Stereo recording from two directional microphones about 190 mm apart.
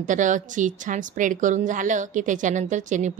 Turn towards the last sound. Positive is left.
turn(degrees=-40)  # may be behind; listen again after turning